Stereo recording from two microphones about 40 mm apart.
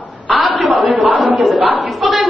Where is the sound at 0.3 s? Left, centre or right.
Right.